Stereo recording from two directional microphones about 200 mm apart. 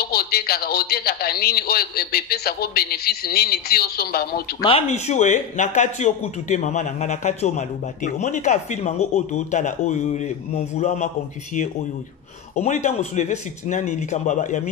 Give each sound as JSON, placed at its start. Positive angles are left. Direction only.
{"t": 0.0, "sound": "speech", "side_deg": 50}
{"t": 4.6, "sound": "speech", "side_deg": 30}
{"t": 12.5, "sound": "speech", "side_deg": 35}